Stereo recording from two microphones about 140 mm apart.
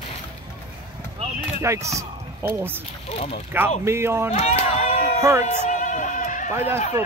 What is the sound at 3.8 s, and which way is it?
Speech, 20° right (ahead or behind).